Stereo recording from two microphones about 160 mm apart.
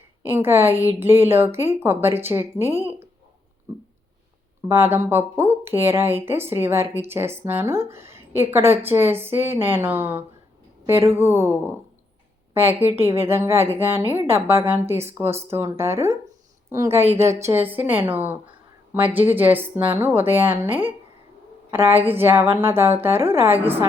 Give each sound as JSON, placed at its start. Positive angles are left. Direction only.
{"t": 0.2, "sound": "speech", "side_deg": -15}
{"t": 4.7, "sound": "speech", "side_deg": -15}
{"t": 13.0, "sound": "speech", "side_deg": -15}
{"t": 17.0, "sound": "speech", "side_deg": -40}
{"t": 17.2, "sound": "speech", "side_deg": -15}